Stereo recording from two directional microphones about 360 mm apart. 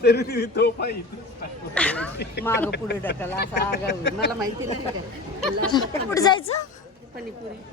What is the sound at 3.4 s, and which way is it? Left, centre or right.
Speech, left.